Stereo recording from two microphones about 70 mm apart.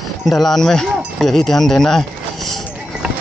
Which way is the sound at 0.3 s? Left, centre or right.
Centre.